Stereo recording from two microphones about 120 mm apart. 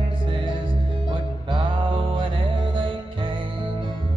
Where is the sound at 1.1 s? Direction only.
45° right (ahead or behind).